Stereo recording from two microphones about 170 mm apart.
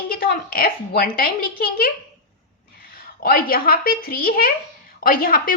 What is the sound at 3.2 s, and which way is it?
Speech, 60° left (ahead or behind).